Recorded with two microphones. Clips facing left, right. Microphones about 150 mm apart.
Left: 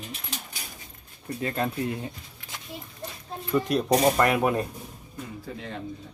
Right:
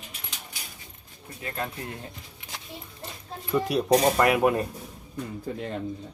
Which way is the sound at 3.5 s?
5° right (ahead or behind).